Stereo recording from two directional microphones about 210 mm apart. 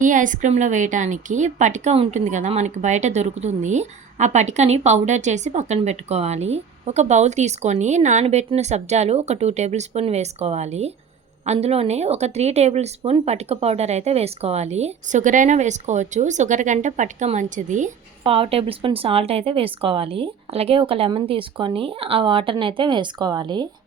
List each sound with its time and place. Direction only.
0.0 s a woman's voice: 40° right (ahead or behind); by 23.6 s 20° right (ahead or behind)